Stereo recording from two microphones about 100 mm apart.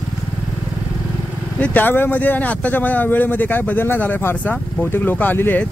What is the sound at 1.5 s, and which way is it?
Speech, 15° left (ahead or behind).